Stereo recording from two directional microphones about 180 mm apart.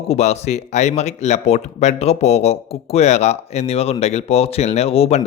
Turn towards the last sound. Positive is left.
turn(degrees=35)  # may be behind; listen again after turning